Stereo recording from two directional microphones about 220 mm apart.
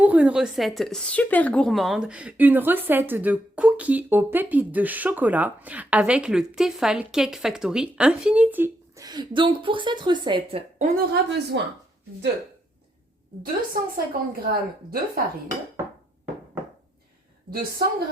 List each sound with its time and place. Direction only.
0.0 s a woman's voice: 5° right (ahead or behind)
10.8 s a woman's voice: 45° right (ahead or behind)
13.9 s a woman's voice: 40° right (ahead or behind)
17.5 s a woman's voice: 45° right (ahead or behind)